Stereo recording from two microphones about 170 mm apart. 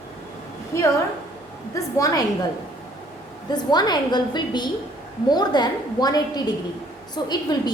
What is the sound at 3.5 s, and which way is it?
A woman's voice, 25° left (ahead or behind).